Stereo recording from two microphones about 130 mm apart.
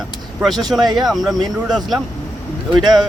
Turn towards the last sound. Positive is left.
turn(degrees=-30)  # may be behind; listen again after turning